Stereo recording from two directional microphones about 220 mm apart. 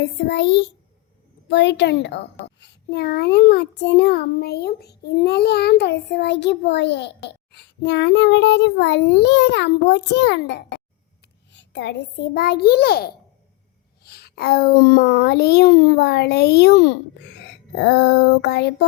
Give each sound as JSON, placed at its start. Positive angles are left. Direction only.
{"t": 0.0, "sound": "a child's voice", "side_deg": 55}